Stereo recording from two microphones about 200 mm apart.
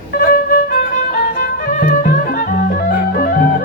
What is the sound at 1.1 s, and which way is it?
Music, 40° left (ahead or behind).